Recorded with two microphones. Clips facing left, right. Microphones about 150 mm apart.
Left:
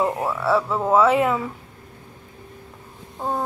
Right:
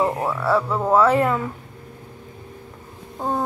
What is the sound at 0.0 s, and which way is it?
Speech, centre (ahead or behind).